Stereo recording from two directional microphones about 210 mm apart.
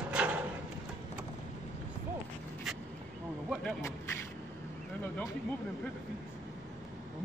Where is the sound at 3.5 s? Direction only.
5° left (ahead or behind).